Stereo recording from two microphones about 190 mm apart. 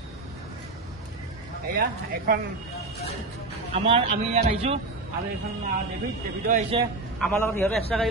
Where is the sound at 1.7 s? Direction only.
50° right (ahead or behind).